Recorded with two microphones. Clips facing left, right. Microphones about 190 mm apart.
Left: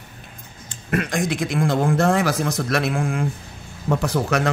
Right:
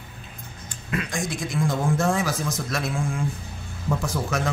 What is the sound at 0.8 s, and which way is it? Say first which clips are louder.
A man's voice: left 6 dB; 55° left (ahead or behind).